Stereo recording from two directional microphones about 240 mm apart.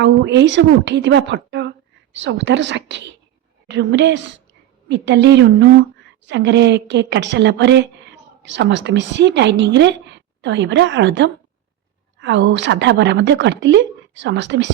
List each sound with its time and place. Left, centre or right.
0.0 s a woman's voice: right